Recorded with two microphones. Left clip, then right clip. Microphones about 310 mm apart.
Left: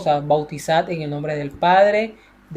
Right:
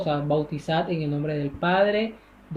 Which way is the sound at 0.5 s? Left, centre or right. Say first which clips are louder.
Left 6 dB; centre.